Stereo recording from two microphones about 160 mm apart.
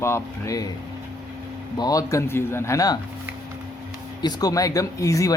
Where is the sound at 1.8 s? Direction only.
20° left (ahead or behind).